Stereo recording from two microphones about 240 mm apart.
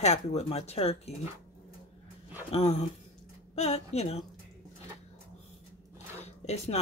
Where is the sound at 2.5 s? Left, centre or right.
Left.